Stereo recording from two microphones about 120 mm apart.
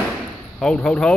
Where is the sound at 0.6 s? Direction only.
10° left (ahead or behind).